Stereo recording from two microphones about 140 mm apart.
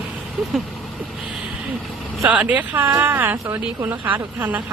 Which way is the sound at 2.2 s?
10° right (ahead or behind).